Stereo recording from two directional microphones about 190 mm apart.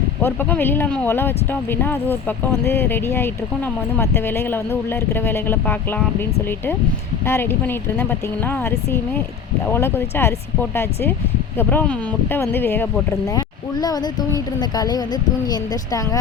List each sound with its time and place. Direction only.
0.2 s speech: 10° left (ahead or behind)
7.3 s speech: 15° left (ahead or behind)